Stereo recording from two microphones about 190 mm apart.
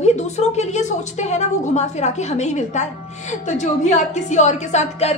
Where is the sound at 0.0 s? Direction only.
35° left (ahead or behind).